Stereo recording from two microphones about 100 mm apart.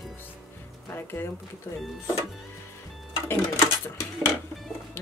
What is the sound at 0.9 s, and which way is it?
Speech, 20° left (ahead or behind).